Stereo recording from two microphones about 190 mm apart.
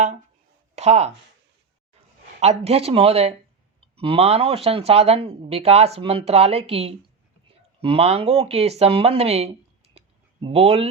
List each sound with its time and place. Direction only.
0.8 s speech: 35° right (ahead or behind)
2.4 s speech: 35° right (ahead or behind)
10.0 s clicking: 30° right (ahead or behind)
10.4 s speech: 30° right (ahead or behind)